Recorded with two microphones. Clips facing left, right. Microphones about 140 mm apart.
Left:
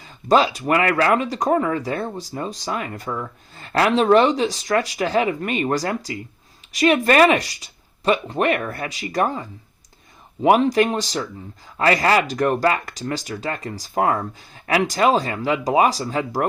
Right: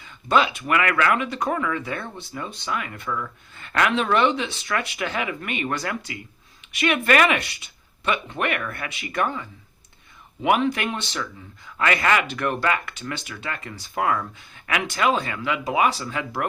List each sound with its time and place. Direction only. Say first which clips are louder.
0.0 s speech: left 4 dB; 35° left (ahead or behind)